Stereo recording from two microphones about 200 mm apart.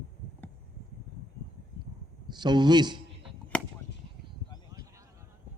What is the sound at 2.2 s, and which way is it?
Speech, 20° right (ahead or behind).